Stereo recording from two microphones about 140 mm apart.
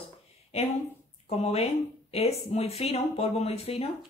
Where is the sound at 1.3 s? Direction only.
50° left (ahead or behind).